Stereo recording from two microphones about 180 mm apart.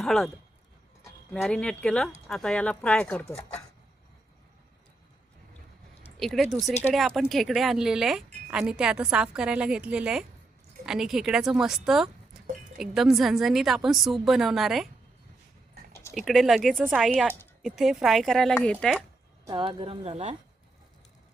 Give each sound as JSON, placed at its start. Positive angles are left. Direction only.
{"t": 0.0, "sound": "speech", "side_deg": 0}
{"t": 1.3, "sound": "speech", "side_deg": 5}
{"t": 6.1, "sound": "speech", "side_deg": 0}
{"t": 16.1, "sound": "speech", "side_deg": 0}
{"t": 19.5, "sound": "speech", "side_deg": -30}